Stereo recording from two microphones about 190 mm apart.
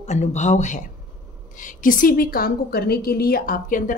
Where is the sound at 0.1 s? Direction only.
35° left (ahead or behind).